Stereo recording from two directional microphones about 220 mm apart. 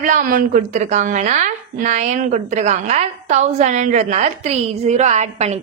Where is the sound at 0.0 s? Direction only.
35° right (ahead or behind).